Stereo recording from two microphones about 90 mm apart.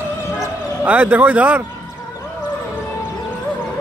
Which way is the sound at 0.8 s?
20° right (ahead or behind).